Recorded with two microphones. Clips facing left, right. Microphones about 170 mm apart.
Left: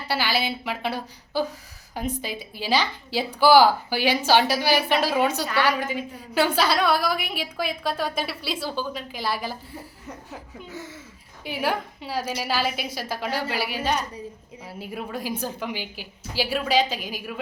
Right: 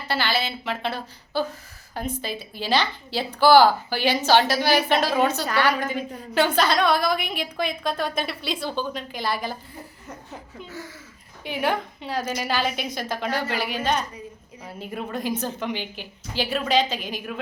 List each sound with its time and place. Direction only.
0.1 s a woman's voice: 10° left (ahead or behind)
10.7 s speech: 20° left (ahead or behind)
11.4 s a woman's voice: 5° left (ahead or behind)